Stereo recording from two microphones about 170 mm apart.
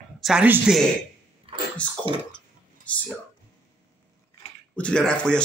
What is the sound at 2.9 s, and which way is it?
Speech, 5° left (ahead or behind).